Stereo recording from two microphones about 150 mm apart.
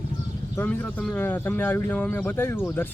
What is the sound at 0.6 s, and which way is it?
A man's voice, 10° left (ahead or behind).